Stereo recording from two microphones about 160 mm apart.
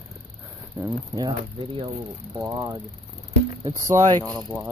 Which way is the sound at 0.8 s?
20° right (ahead or behind).